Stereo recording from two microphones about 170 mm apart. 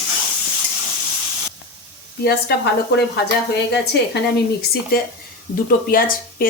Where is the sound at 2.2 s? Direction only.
70° left (ahead or behind).